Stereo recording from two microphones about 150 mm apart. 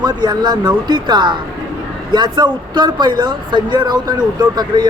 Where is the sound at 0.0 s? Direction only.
25° right (ahead or behind).